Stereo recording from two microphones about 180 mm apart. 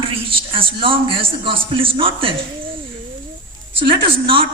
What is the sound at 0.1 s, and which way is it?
A man's voice, 30° right (ahead or behind).